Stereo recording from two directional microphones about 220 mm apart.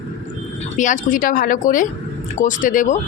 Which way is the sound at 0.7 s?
35° left (ahead or behind).